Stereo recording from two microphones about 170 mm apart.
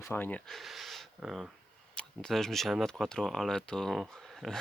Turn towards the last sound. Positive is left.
turn(degrees=0)  # may be behind; listen again after turning